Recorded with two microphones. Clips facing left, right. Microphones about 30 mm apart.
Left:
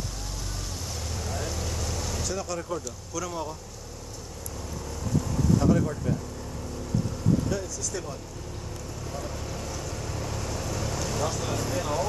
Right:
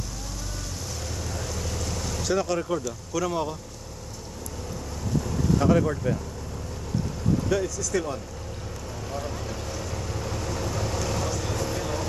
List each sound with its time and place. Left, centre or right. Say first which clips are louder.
1.3 s vehicle: left 1 dB; centre
2.2 s speech: right 10 dB; right
5.6 s speech: right 3 dB; right
7.4 s speech: right 5 dB; right
9.2 s boat: right 2 dB; right
9.9 s vehicle: right 2 dB; centre